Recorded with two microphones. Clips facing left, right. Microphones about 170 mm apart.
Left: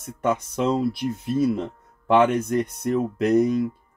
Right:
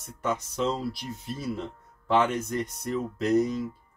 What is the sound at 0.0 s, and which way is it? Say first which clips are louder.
Speech: left 6 dB; 60° left (ahead or behind).